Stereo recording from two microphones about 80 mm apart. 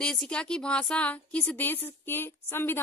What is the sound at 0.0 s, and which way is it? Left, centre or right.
Speech, centre.